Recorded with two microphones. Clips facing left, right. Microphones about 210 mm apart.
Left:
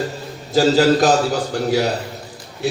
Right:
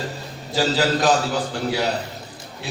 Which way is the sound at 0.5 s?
45° left (ahead or behind).